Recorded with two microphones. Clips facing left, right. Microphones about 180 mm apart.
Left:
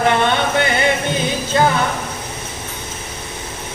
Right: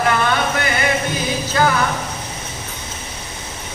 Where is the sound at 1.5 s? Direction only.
25° left (ahead or behind).